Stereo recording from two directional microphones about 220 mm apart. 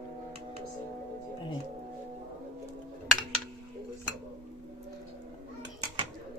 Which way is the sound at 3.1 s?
Centre (ahead or behind).